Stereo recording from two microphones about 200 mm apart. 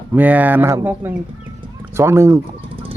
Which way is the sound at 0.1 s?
10° right (ahead or behind).